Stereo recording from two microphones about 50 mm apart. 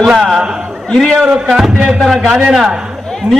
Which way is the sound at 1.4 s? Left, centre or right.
Centre.